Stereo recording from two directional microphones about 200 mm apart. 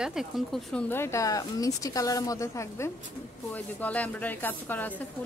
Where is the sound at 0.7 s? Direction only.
10° left (ahead or behind).